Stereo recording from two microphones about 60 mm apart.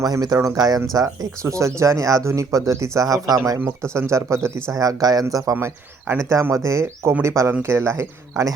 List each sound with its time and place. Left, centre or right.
0.0 s speech: right
0.9 s speech: right
3.9 s speech: right
4.8 s speech: right
6.1 s speech: right